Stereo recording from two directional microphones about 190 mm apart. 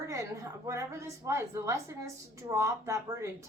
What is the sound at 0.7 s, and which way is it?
Speech, 15° right (ahead or behind).